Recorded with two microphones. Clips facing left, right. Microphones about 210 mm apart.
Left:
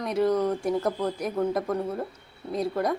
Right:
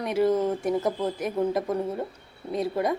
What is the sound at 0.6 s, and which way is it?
A woman's voice, centre (ahead or behind).